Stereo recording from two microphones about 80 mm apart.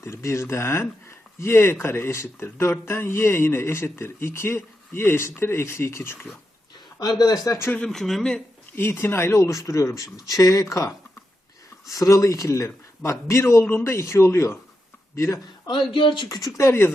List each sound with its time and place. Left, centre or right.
0.0 s speech: left
7.0 s speech: left
7.9 s speech: centre
8.7 s speech: left
11.9 s speech: left
15.9 s speech: left
16.3 s speech: left